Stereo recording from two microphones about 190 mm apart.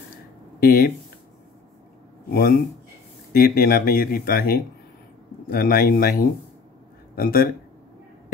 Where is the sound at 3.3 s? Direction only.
50° left (ahead or behind).